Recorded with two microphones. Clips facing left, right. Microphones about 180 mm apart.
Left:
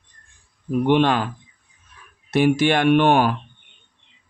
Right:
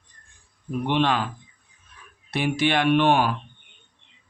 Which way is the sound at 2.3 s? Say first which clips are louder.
Left 6 dB; 45° left (ahead or behind).